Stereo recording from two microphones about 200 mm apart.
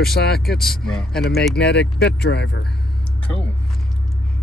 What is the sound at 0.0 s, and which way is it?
Speech, 50° left (ahead or behind).